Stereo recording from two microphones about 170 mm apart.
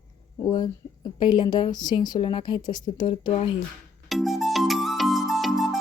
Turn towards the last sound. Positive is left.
turn(degrees=0)  # may be behind; listen again after turning